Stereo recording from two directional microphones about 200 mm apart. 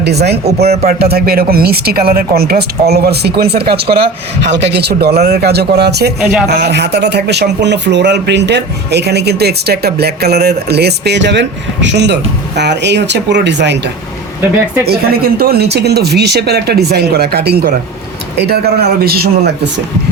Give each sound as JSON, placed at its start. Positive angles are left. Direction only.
{"t": 0.0, "sound": "speech", "side_deg": -55}